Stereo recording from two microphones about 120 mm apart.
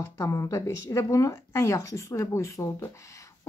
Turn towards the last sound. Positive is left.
turn(degrees=25)  # may be behind; listen again after turning